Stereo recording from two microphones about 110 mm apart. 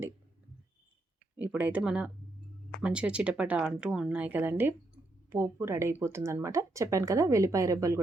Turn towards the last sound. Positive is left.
turn(degrees=-30)  # may be behind; listen again after turning